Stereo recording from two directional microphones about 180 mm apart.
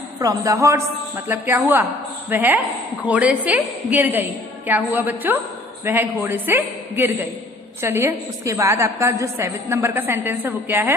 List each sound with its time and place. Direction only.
0.2 s a woman's voice: 20° right (ahead or behind)